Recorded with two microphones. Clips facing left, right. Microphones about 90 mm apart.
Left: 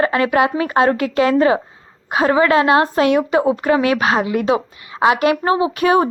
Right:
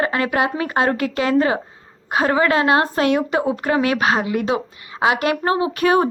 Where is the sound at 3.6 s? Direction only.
35° right (ahead or behind).